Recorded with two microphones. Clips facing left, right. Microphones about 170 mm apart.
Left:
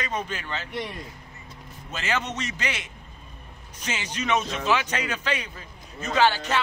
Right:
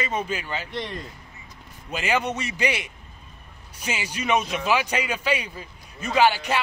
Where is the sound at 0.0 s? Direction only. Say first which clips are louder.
Right 3 dB; 10° right (ahead or behind).